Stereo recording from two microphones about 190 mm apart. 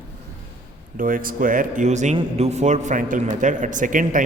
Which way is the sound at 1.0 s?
45° right (ahead or behind).